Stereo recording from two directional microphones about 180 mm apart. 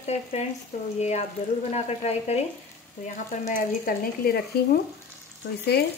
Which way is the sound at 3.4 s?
50° left (ahead or behind).